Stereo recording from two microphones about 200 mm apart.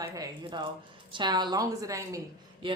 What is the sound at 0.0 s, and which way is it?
A woman's voice, 15° right (ahead or behind).